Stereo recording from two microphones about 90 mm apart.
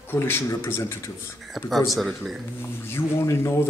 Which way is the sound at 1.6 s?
Centre (ahead or behind).